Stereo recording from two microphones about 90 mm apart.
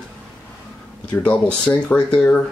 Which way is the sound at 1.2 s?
15° left (ahead or behind).